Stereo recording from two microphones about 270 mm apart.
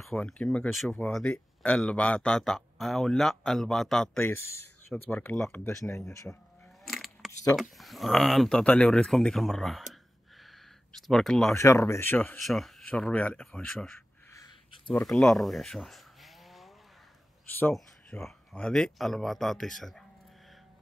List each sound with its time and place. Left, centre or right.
0.0 s speech: centre
6.8 s a sound: centre
7.7 s speech: centre